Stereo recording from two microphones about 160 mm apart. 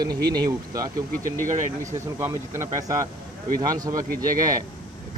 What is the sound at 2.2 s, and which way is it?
Speech, 15° right (ahead or behind).